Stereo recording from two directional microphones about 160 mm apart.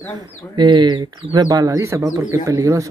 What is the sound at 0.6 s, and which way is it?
Speech, 25° right (ahead or behind).